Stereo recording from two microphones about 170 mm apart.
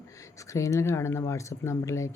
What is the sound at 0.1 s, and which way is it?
Speech, 20° left (ahead or behind).